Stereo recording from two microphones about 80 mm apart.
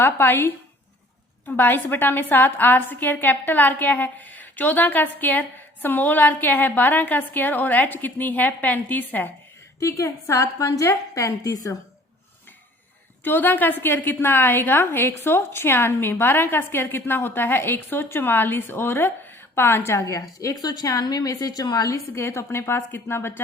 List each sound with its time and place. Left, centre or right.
0.0 s a woman's voice: left
9.8 s a woman's voice: left
13.2 s a woman's voice: left